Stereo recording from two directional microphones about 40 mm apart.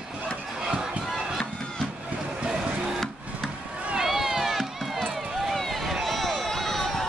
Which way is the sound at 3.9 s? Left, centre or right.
Centre.